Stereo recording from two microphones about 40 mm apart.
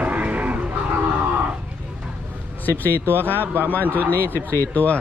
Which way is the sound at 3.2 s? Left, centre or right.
Left.